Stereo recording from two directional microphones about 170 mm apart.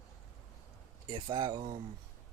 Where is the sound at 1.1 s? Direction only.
30° right (ahead or behind).